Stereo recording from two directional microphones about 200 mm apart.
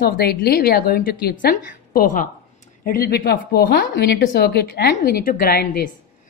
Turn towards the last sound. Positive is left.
turn(degrees=50)  # may be behind; listen again after turning